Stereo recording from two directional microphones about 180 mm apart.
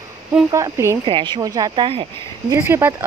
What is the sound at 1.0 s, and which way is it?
Speech, 25° right (ahead or behind).